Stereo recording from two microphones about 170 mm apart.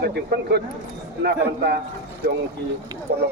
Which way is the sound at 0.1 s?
75° right (ahead or behind).